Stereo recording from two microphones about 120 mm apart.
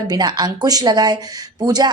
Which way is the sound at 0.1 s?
35° right (ahead or behind).